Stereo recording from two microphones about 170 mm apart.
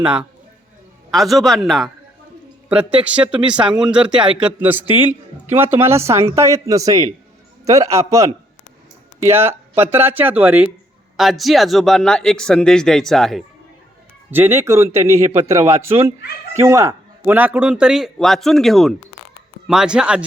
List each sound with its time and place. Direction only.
0.0 s a man's voice: 5° right (ahead or behind)
14.3 s a man's voice: 10° right (ahead or behind)